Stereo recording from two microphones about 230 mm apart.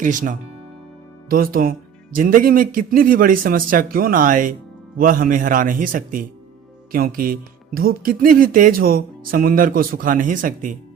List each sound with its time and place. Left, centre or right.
0.0 s speech: right